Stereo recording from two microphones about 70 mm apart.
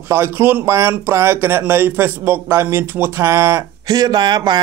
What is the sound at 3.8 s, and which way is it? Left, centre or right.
Speech, right.